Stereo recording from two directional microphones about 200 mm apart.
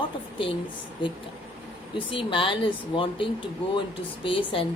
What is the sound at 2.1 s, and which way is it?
Speech, 25° left (ahead or behind).